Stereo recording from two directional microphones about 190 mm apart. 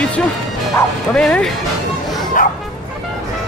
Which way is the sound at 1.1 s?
5° left (ahead or behind).